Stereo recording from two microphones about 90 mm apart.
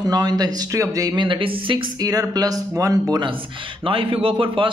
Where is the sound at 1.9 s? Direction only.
45° right (ahead or behind).